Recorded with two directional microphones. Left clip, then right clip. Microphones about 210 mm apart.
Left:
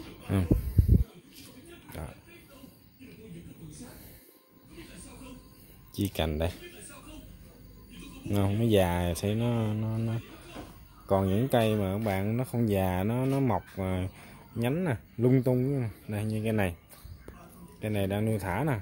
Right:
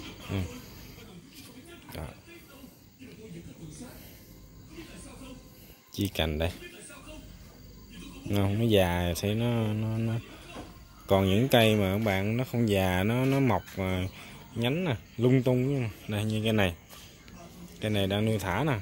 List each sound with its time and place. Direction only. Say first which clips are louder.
5.9 s speech: right 1 dB; 15° left (ahead or behind)
8.3 s speech: right 1 dB; 15° left (ahead or behind)
17.7 s speech: right 2 dB; 5° left (ahead or behind)